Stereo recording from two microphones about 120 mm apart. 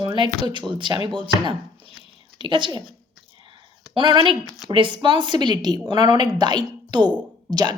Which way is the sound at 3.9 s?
40° right (ahead or behind).